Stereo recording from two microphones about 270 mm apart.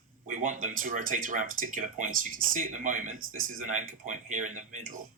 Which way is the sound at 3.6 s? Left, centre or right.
Right.